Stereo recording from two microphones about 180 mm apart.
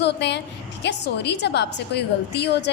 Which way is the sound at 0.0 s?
70° left (ahead or behind).